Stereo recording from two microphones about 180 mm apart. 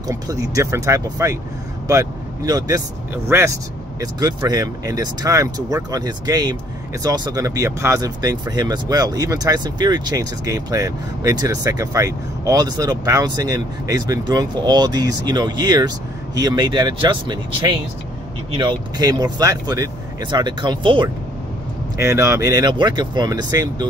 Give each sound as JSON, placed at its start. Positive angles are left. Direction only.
{"t": 0.1, "sound": "speech", "side_deg": -20}
{"t": 22.0, "sound": "speech", "side_deg": -15}